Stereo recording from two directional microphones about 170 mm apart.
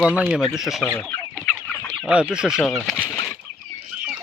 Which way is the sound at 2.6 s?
Centre (ahead or behind).